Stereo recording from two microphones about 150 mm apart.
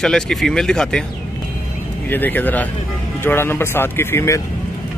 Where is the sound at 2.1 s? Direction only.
10° left (ahead or behind).